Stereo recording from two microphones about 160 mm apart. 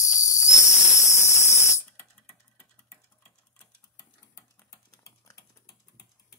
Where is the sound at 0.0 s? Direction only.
20° left (ahead or behind).